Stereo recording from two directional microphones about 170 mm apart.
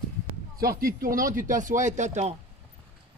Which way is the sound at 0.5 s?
60° right (ahead or behind).